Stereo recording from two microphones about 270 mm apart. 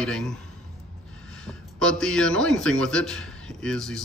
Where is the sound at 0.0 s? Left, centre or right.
Centre.